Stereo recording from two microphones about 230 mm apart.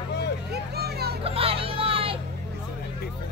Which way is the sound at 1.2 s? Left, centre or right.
Right.